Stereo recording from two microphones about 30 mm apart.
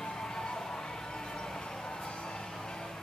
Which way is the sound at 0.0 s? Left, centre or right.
Left.